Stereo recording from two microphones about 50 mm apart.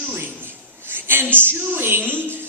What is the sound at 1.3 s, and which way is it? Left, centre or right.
Speech, right.